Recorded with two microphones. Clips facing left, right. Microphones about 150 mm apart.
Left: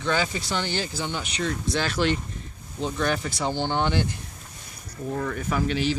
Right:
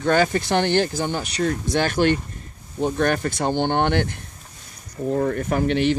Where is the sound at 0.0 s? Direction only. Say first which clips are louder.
Right 7 dB; 55° right (ahead or behind).